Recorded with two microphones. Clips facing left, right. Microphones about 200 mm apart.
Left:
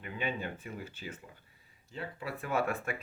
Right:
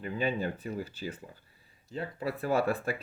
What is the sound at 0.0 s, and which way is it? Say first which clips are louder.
Speech: right 6 dB; 35° right (ahead or behind).